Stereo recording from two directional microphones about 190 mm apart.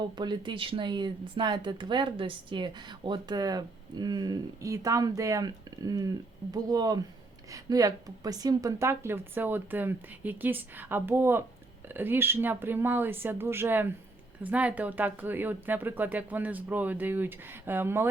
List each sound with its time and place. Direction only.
0.0 s a woman's voice: 25° right (ahead or behind)